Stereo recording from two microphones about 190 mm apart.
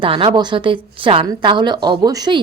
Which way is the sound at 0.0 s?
30° right (ahead or behind).